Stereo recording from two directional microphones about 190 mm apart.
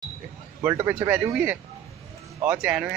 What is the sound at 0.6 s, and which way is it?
Speech, 10° right (ahead or behind).